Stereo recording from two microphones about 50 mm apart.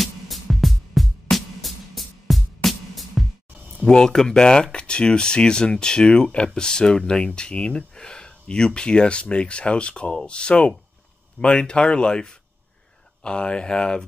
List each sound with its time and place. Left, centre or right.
0.0 s music: centre
3.8 s speech: centre